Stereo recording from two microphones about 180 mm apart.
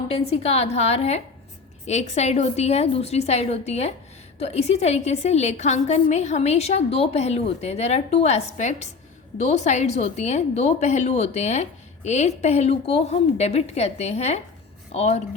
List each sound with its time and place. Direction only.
0.1 s a woman's voice: 35° left (ahead or behind)